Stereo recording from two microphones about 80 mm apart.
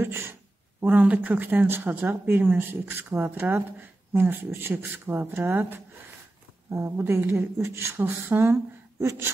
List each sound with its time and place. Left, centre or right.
0.0 s speech: right
6.7 s speech: right